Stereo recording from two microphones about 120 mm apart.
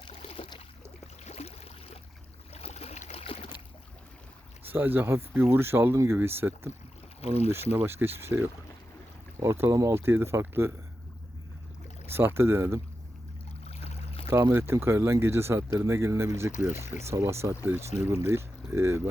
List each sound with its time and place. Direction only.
0.1 s boat: 60° left (ahead or behind)
1.2 s a sound: 60° left (ahead or behind)
4.7 s speech: 15° right (ahead or behind)
7.2 s speech: 60° left (ahead or behind)
7.5 s speech: 20° right (ahead or behind)
12.0 s speech: 20° right (ahead or behind)
13.7 s a sound: 60° left (ahead or behind)
14.3 s speech: 20° right (ahead or behind)
16.5 s speech: 90° left
16.8 s speech: 25° right (ahead or behind)